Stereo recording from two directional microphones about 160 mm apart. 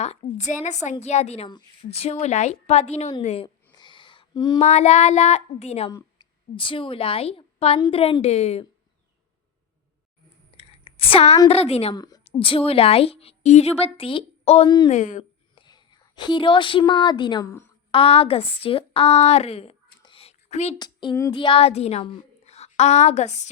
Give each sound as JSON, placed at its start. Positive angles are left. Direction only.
{"t": 0.3, "sound": "speech", "side_deg": 45}
{"t": 1.5, "sound": "a woman's voice", "side_deg": 30}
{"t": 1.9, "sound": "a woman's voice", "side_deg": 40}
{"t": 4.5, "sound": "speech", "side_deg": 45}
{"t": 5.9, "sound": "a woman's voice", "side_deg": 30}
{"t": 10.6, "sound": "a sound", "side_deg": 40}
{"t": 11.4, "sound": "a woman's voice", "side_deg": 40}
{"t": 11.9, "sound": "a woman's voice", "side_deg": 25}
{"t": 12.2, "sound": "a woman's voice", "side_deg": 35}
{"t": 14.8, "sound": "speech", "side_deg": 50}
{"t": 15.2, "sound": "a woman's voice", "side_deg": 30}
{"t": 20.0, "sound": "a sound", "side_deg": 35}
{"t": 20.7, "sound": "speech", "side_deg": 25}